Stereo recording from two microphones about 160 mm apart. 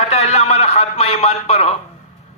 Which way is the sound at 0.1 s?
40° left (ahead or behind).